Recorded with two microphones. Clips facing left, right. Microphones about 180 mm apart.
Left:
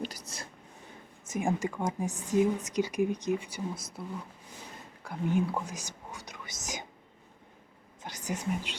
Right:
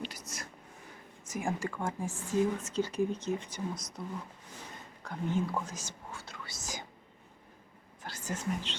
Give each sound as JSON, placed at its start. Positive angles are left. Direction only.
{"t": 0.0, "sound": "a sound", "side_deg": 35}
{"t": 1.2, "sound": "speech", "side_deg": 25}
{"t": 5.0, "sound": "speech", "side_deg": 10}
{"t": 8.0, "sound": "speech", "side_deg": 15}